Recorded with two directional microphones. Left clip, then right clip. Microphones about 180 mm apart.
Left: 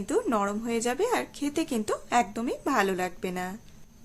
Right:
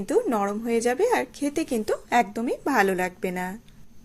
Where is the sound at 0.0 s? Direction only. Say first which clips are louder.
Right 3 dB; 15° right (ahead or behind).